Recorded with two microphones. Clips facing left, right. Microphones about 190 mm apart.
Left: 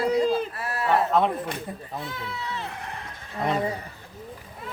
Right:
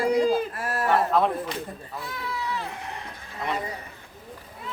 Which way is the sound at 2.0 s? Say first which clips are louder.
Right 6 dB; 25° left (ahead or behind).